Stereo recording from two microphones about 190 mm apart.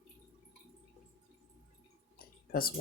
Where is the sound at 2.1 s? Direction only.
50° left (ahead or behind).